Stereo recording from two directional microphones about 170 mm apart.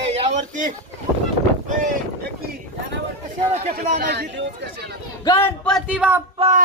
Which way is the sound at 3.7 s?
55° right (ahead or behind).